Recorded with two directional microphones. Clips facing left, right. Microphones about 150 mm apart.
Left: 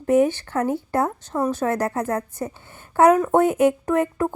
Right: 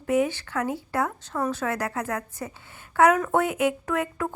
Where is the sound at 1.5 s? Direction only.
45° left (ahead or behind).